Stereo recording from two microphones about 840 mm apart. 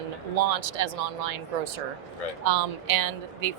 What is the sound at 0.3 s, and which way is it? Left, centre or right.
Speech, right.